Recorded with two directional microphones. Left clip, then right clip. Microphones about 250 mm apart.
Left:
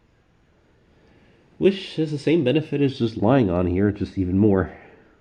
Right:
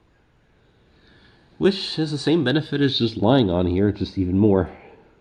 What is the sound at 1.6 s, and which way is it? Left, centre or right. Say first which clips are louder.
Speech: even; right.